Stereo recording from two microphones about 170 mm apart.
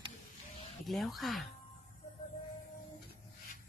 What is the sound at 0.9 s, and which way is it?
Speech, centre (ahead or behind).